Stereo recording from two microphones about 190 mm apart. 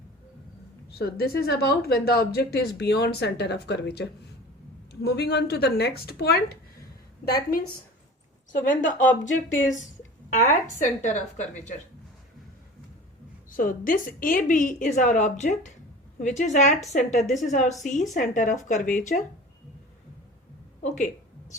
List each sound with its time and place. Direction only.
0.9 s a woman's voice: 55° left (ahead or behind)
8.6 s a woman's voice: 45° left (ahead or behind)
13.5 s a woman's voice: 45° left (ahead or behind)
20.8 s a woman's voice: 40° left (ahead or behind)